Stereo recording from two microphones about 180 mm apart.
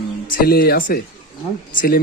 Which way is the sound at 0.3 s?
60° left (ahead or behind).